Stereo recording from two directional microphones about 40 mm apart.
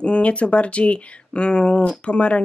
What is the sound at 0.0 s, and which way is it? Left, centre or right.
Speech, left.